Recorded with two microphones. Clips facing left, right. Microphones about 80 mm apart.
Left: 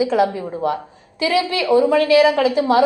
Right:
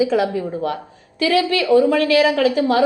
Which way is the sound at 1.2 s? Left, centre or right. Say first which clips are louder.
Right 1 dB; centre.